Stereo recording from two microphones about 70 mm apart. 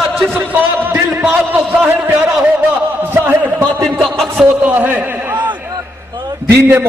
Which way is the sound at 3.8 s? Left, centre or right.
Centre.